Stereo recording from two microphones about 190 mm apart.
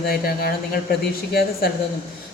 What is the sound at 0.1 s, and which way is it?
Speech, 55° left (ahead or behind).